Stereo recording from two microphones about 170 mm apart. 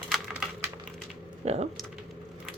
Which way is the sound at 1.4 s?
40° right (ahead or behind).